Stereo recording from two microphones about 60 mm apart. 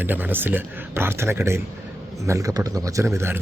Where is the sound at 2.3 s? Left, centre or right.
Right.